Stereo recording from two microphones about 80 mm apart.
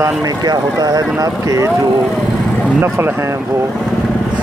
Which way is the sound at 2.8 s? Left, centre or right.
Right.